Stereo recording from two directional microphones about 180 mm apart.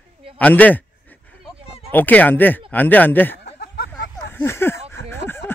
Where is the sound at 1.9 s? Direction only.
10° left (ahead or behind).